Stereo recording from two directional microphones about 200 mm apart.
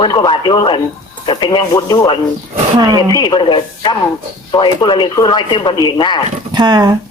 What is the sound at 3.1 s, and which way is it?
Speech, 20° left (ahead or behind).